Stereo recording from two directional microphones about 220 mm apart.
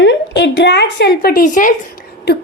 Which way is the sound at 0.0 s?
55° left (ahead or behind).